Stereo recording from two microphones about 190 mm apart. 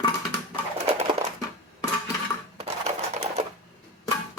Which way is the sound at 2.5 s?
35° right (ahead or behind).